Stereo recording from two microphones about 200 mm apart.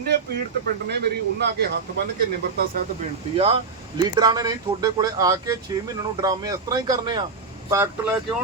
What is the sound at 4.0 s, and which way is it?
Speech, 20° right (ahead or behind).